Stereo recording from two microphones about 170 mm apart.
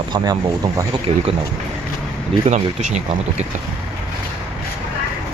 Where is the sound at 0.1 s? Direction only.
25° right (ahead or behind).